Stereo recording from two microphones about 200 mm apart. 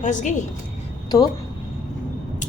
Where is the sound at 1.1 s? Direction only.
20° left (ahead or behind).